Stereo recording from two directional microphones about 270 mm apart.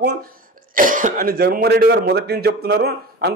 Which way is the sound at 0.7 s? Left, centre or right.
Right.